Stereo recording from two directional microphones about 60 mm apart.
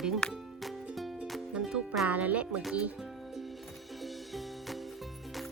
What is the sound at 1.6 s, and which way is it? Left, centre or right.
Music, centre.